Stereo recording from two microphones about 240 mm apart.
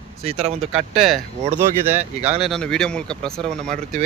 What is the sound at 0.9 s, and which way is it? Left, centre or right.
Speech, centre.